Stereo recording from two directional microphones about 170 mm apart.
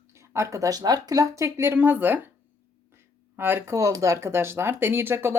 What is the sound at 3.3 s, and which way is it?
Speech, 15° right (ahead or behind).